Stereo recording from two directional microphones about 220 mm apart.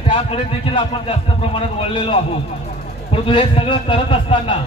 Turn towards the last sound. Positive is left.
turn(degrees=25)  # may be behind; listen again after turning